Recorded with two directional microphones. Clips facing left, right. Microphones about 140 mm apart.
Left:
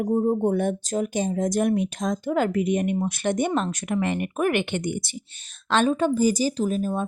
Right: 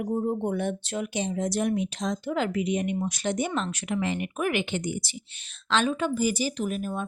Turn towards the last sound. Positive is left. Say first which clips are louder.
# left 5 dB
turn(degrees=35)  # may be behind; listen again after turning